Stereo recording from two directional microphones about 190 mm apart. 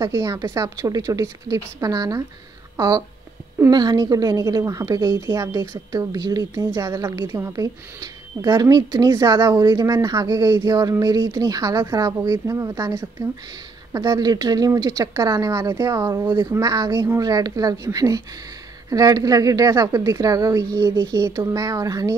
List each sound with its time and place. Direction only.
0.0 s speech: 15° right (ahead or behind)
3.5 s a woman's voice: 15° right (ahead or behind)